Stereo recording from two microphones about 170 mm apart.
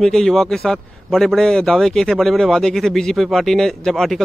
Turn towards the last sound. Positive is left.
turn(degrees=0)  # may be behind; listen again after turning